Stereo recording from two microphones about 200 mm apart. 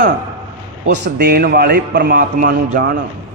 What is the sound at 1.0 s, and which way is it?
Mantra, 55° right (ahead or behind).